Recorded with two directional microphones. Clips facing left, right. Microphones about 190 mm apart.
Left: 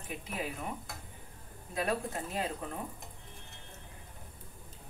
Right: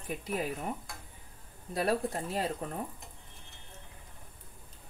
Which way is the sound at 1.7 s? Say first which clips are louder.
Right 3 dB; 35° right (ahead or behind).